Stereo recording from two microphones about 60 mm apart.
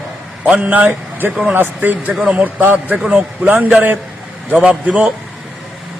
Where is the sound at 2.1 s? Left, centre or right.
Centre.